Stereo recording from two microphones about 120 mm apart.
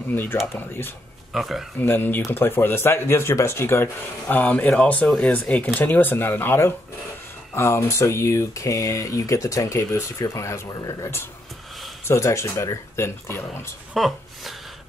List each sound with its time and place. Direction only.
0.1 s speech: 15° left (ahead or behind)
1.3 s speech: centre (ahead or behind)
1.8 s speech: 15° left (ahead or behind)
13.9 s speech: centre (ahead or behind)